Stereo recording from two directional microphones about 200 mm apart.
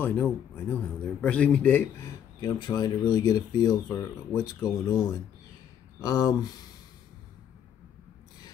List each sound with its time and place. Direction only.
0.0 s a man's voice: 10° left (ahead or behind)